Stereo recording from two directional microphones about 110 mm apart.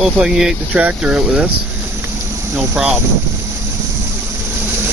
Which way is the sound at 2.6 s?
10° right (ahead or behind).